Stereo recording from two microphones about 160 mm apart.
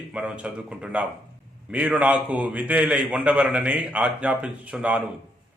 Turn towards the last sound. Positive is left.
turn(degrees=-10)  # may be behind; listen again after turning